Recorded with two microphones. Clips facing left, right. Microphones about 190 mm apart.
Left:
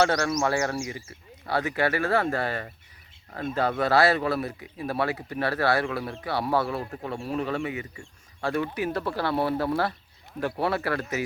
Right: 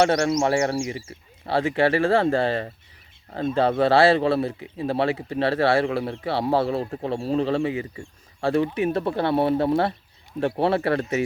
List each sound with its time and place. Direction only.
0.0 s speech: 25° right (ahead or behind)